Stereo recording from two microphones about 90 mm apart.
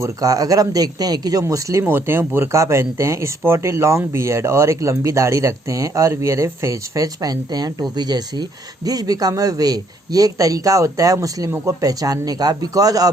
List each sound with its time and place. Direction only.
0.0 s speech: 40° right (ahead or behind)
1.8 s a man's voice: 25° right (ahead or behind); by 13.1 s 40° right (ahead or behind)